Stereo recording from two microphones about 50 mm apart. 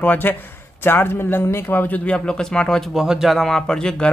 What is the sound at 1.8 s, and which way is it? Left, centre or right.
Speech, left.